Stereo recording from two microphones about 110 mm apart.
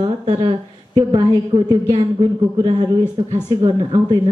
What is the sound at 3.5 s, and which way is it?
Speech, 35° right (ahead or behind).